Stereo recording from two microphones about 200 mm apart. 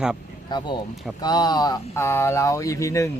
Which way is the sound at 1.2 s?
20° left (ahead or behind).